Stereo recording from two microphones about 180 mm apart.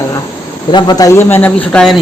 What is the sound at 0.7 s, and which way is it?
Speech, 25° left (ahead or behind).